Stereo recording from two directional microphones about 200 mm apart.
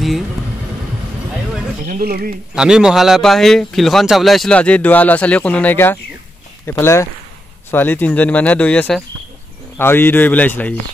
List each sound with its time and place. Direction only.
1.9 s speech: 45° right (ahead or behind)
2.5 s speech: 5° right (ahead or behind)